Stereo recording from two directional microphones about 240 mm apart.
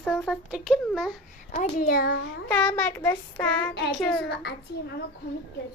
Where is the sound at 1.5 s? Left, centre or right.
Left.